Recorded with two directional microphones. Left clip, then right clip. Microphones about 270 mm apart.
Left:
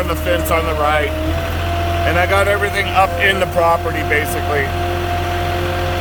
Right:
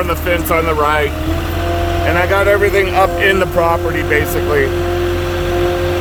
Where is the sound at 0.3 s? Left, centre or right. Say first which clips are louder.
Right 2 dB; centre.